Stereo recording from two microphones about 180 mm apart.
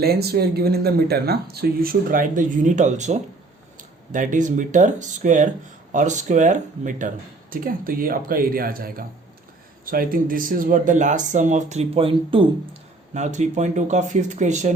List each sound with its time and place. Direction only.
0.0 s speech: 60° right (ahead or behind); by 12.5 s 30° right (ahead or behind)
13.1 s speech: 40° right (ahead or behind)